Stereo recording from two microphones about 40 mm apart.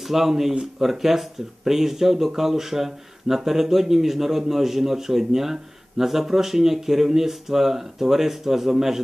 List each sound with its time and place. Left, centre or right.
0.0 s speech: centre